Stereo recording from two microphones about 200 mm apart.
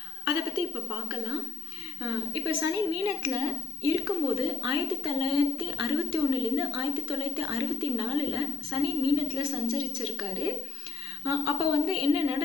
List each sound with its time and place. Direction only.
2.0 s a woman's voice: 20° right (ahead or behind)